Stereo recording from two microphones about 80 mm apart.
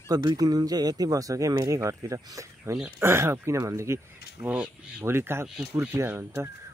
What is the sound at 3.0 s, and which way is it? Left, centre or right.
Speech, right.